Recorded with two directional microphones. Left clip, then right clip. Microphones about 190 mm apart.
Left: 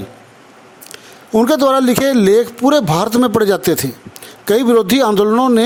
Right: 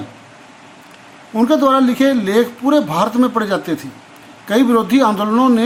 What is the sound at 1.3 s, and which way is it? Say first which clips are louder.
Speech: left 1 dB; 50° left (ahead or behind).